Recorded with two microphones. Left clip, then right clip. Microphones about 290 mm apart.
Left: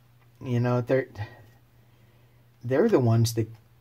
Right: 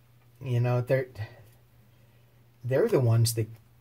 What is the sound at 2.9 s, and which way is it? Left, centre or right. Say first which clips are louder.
Speech: left 3 dB; left.